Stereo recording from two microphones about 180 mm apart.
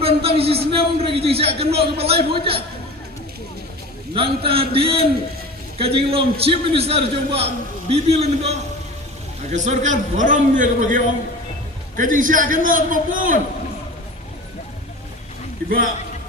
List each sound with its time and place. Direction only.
0.0 s a man's voice: 30° right (ahead or behind)
4.1 s a man's voice: 30° right (ahead or behind); by 13.4 s 50° right (ahead or behind)